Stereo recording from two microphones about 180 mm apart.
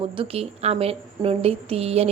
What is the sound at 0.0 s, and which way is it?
A woman's voice, 30° right (ahead or behind).